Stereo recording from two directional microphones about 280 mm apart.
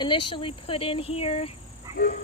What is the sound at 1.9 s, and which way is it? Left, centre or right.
Dog, left.